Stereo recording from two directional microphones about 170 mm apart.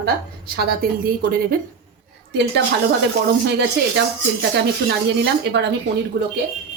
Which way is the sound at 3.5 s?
90° right.